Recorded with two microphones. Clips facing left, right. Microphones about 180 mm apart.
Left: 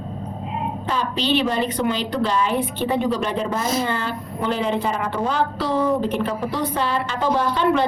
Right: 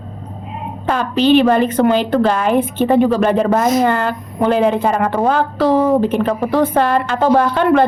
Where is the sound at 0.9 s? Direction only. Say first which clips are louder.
Right 10 dB; 55° right (ahead or behind).